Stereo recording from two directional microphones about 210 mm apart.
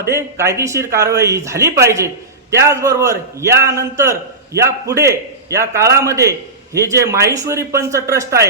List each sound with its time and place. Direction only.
0.1 s a man's voice: 15° right (ahead or behind)